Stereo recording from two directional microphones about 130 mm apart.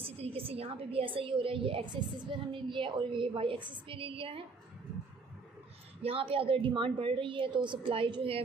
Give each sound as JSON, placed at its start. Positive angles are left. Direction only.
{"t": 0.0, "sound": "a woman's voice", "side_deg": -45}
{"t": 6.0, "sound": "a woman's voice", "side_deg": -45}